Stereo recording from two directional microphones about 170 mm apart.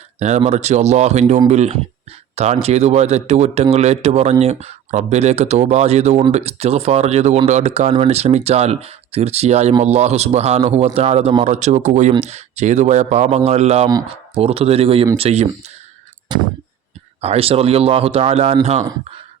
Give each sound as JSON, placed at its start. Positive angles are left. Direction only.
{"t": 0.2, "sound": "speech", "side_deg": -40}
{"t": 16.3, "sound": "a sound", "side_deg": -25}
{"t": 17.2, "sound": "speech", "side_deg": -35}